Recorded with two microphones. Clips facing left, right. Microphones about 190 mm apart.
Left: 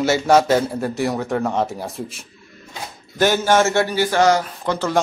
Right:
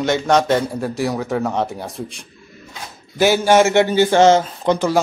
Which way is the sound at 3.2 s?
10° right (ahead or behind).